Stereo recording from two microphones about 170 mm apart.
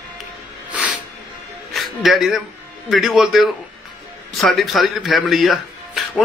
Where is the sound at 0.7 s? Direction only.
5° right (ahead or behind).